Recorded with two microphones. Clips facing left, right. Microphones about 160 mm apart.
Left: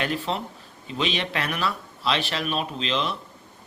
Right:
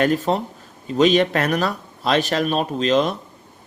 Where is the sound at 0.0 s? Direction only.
45° right (ahead or behind).